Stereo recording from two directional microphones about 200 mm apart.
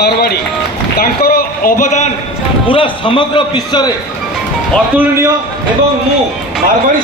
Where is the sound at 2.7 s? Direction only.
25° left (ahead or behind).